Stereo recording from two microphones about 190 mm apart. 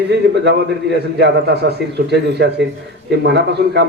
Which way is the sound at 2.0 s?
60° right (ahead or behind).